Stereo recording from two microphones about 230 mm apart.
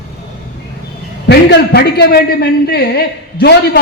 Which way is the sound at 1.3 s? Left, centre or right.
Left.